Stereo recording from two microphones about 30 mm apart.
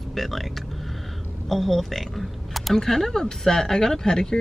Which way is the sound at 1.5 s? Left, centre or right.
Centre.